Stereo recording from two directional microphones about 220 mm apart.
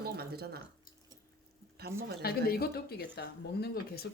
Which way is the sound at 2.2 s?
45° left (ahead or behind).